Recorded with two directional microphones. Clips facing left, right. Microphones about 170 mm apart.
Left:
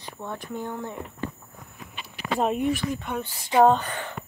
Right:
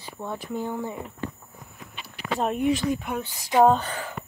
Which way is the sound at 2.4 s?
Centre (ahead or behind).